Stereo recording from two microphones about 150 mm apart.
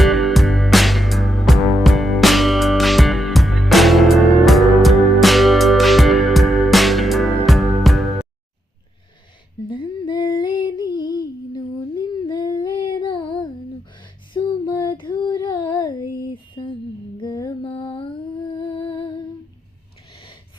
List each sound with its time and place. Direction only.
0.0 s music: centre (ahead or behind)
9.6 s female singing: 30° left (ahead or behind)
14.0 s a sound: 30° left (ahead or behind)
16.3 s mantra: 35° left (ahead or behind)
18.8 s music: 35° left (ahead or behind)